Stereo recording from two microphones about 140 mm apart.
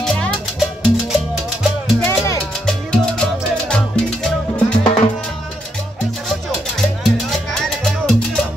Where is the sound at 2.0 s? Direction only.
15° left (ahead or behind).